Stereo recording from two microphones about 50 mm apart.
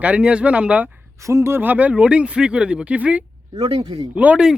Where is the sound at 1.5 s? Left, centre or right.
Right.